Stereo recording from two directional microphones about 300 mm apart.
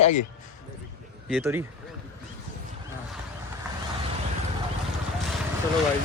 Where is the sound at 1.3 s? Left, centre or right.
Centre.